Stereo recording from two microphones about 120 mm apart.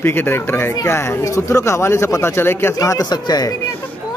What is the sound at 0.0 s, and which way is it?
Speech, 20° left (ahead or behind).